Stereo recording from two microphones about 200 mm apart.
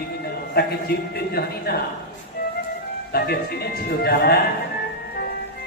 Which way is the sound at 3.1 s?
50° left (ahead or behind).